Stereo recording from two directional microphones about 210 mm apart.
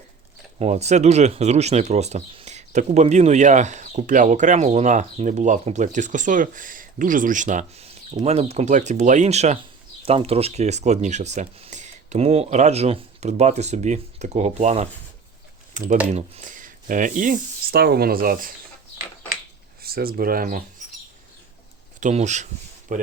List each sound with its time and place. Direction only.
0.6 s speech: 30° right (ahead or behind)
19.8 s speech: 45° right (ahead or behind)
22.0 s speech: 35° right (ahead or behind)